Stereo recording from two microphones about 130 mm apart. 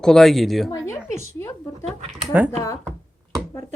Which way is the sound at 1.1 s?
20° left (ahead or behind).